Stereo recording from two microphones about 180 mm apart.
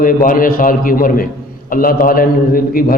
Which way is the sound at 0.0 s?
50° left (ahead or behind).